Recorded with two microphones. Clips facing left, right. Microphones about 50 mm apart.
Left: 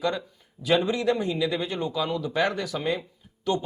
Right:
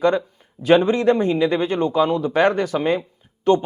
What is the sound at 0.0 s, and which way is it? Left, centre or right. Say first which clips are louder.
A man's voice: right 9 dB; right.